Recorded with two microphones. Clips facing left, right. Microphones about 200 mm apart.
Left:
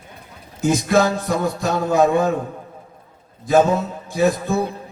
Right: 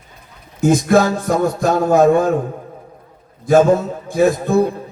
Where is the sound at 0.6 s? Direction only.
55° right (ahead or behind).